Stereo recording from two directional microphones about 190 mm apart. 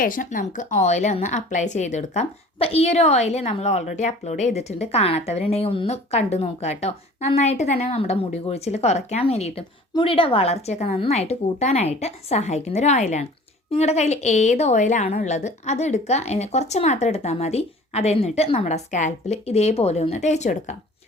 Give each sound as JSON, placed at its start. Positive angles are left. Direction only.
{"t": 0.0, "sound": "a woman's voice", "side_deg": 45}